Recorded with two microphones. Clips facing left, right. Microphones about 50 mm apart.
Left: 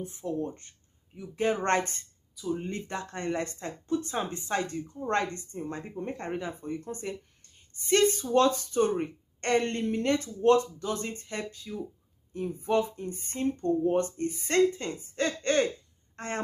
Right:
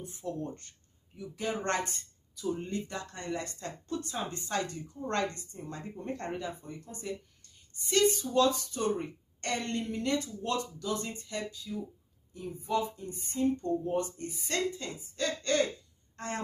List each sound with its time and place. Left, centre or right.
0.0 s speech: left
2.4 s speech: centre
2.7 s a woman's voice: left
6.5 s a woman's voice: left